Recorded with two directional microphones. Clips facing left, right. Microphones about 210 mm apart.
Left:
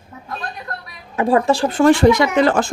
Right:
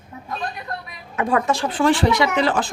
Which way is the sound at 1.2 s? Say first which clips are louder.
Left 5 dB; 30° left (ahead or behind).